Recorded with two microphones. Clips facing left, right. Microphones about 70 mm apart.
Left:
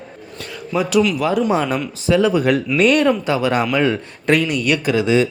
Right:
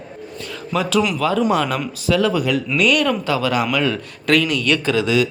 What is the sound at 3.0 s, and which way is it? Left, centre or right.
Speech, left.